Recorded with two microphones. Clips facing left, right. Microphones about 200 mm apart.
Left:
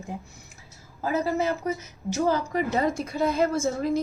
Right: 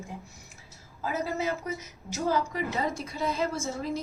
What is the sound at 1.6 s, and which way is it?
A woman's voice, 60° left (ahead or behind).